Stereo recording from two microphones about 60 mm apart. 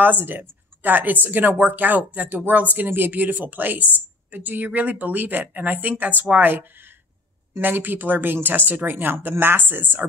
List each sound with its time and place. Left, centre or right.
0.0 s a woman's voice: right